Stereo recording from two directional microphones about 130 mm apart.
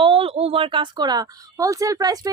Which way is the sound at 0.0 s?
45° right (ahead or behind).